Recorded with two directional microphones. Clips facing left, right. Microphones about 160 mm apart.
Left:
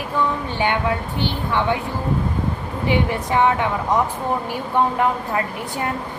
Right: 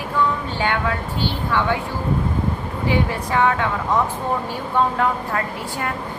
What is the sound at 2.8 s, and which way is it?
Speech, 20° left (ahead or behind).